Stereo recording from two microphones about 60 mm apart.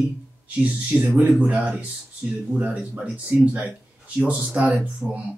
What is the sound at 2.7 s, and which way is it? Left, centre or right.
Speech, centre.